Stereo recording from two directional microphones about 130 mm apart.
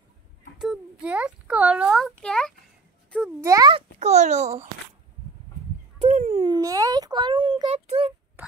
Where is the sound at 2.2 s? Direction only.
5° left (ahead or behind).